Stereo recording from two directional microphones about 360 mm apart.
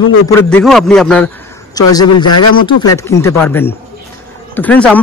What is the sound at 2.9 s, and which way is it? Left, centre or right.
Speech, centre.